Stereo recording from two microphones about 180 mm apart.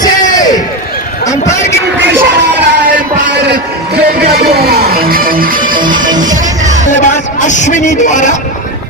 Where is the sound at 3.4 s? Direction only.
65° right (ahead or behind).